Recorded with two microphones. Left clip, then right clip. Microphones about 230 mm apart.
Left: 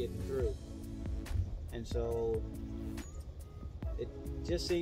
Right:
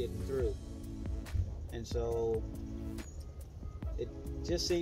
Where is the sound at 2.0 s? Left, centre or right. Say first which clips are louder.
Right 1 dB; centre.